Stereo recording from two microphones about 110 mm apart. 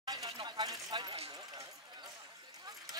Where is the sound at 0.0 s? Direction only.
40° right (ahead or behind).